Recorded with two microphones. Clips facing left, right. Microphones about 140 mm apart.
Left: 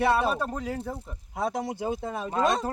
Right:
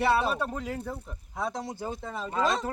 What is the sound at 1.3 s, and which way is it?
Speech, 25° left (ahead or behind).